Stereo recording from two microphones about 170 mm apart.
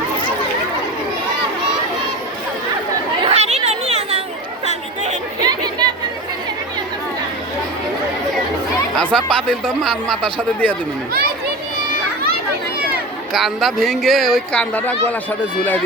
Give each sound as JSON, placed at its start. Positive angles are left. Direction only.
{"t": 3.2, "sound": "chatter", "side_deg": -40}
{"t": 5.4, "sound": "chatter", "side_deg": -25}
{"t": 9.0, "sound": "speech", "side_deg": 5}
{"t": 13.3, "sound": "speech", "side_deg": 0}